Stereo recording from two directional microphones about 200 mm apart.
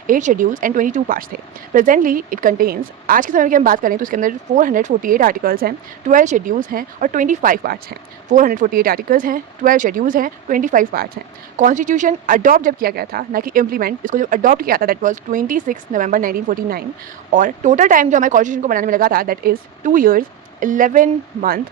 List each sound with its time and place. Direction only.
0.1 s a woman's voice: 40° right (ahead or behind)